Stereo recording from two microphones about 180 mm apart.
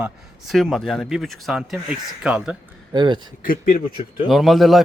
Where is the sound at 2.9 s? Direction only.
25° right (ahead or behind).